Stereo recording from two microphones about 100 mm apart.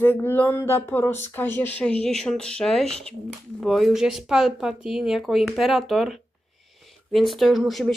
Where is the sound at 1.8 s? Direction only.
10° left (ahead or behind).